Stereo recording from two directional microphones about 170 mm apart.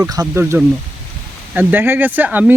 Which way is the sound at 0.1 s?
20° right (ahead or behind).